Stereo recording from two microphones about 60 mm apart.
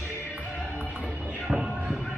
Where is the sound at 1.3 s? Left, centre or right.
Centre.